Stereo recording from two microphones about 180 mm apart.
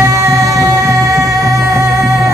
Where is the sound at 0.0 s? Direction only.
15° right (ahead or behind).